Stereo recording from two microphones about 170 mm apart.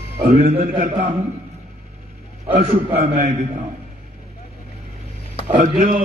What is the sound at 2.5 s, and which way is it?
Speech, 35° right (ahead or behind).